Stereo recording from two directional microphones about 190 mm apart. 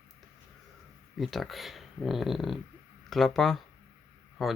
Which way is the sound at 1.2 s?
Centre (ahead or behind).